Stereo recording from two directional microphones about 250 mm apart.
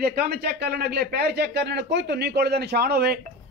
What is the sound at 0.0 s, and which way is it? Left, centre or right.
Speech, right.